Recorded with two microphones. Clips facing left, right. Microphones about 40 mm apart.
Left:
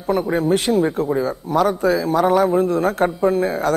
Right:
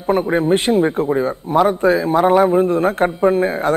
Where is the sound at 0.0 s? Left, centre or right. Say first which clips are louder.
Right 3 dB; right.